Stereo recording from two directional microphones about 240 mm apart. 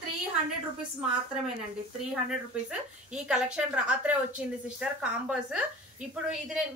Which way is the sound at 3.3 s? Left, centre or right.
Centre.